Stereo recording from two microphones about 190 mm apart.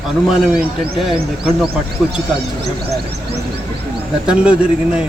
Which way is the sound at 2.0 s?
Centre (ahead or behind).